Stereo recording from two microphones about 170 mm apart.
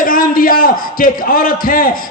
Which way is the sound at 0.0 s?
55° left (ahead or behind).